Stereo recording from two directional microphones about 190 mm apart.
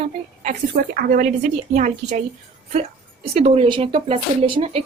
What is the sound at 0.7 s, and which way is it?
Speech, 50° right (ahead or behind).